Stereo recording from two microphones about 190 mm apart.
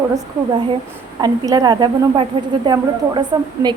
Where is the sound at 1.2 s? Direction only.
20° right (ahead or behind).